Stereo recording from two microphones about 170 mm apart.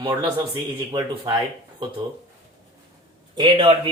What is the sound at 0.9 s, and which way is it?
Speech, 25° right (ahead or behind).